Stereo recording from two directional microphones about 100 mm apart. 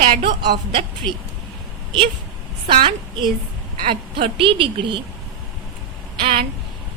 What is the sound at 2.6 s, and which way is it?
A woman's voice, 55° right (ahead or behind).